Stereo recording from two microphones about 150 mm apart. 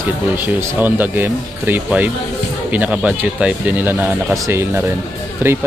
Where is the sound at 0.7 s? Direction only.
15° right (ahead or behind).